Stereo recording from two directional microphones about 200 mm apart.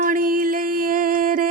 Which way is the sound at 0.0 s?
45° right (ahead or behind).